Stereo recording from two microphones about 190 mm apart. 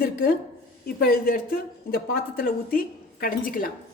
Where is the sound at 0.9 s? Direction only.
55° left (ahead or behind).